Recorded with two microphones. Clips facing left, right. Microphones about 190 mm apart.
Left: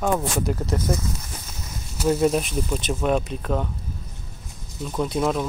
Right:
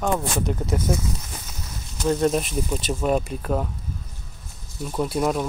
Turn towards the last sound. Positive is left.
turn(degrees=-5)  # may be behind; listen again after turning